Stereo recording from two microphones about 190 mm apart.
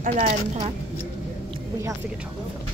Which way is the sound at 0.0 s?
45° right (ahead or behind).